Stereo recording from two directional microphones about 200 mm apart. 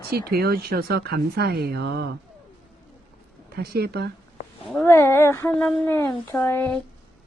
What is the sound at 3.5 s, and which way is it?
Speech, 50° right (ahead or behind).